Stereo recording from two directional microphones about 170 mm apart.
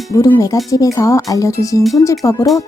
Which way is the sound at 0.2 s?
20° left (ahead or behind).